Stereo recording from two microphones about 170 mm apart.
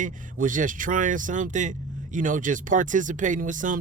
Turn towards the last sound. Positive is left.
turn(degrees=-50)  # may be behind; listen again after turning